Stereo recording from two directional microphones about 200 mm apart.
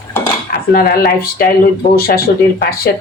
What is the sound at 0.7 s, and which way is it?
Speech, 50° left (ahead or behind).